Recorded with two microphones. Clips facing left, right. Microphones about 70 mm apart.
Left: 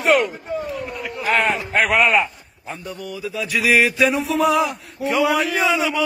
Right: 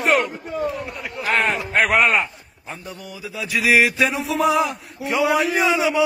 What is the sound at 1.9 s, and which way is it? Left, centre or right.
Male singing, centre.